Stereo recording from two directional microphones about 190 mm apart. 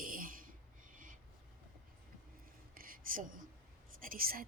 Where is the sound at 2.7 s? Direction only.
50° right (ahead or behind).